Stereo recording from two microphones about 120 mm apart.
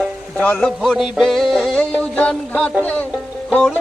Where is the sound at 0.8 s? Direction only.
Centre (ahead or behind).